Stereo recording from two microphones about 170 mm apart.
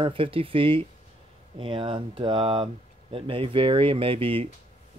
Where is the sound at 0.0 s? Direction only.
30° right (ahead or behind).